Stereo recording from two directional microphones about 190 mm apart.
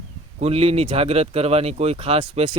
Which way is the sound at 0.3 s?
30° right (ahead or behind).